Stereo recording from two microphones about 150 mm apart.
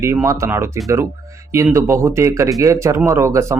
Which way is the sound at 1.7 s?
20° right (ahead or behind).